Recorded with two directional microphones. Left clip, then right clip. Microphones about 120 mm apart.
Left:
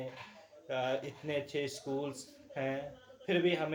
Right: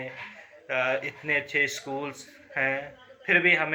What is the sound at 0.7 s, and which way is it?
Speech, 35° left (ahead or behind).